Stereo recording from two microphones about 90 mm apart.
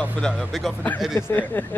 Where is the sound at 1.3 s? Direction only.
20° left (ahead or behind).